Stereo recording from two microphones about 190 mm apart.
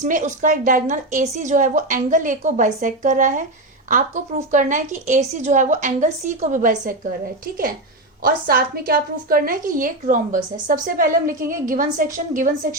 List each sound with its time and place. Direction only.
0.0 s speech: 40° right (ahead or behind)
8.2 s a woman's voice: 50° right (ahead or behind)